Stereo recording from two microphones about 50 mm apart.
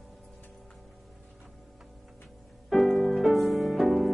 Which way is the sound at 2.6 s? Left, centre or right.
Centre.